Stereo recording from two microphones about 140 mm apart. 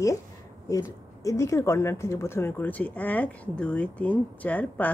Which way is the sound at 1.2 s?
25° left (ahead or behind).